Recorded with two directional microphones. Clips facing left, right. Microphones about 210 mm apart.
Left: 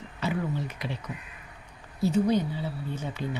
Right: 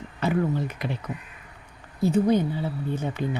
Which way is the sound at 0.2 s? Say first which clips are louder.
Right 6 dB; 50° right (ahead or behind).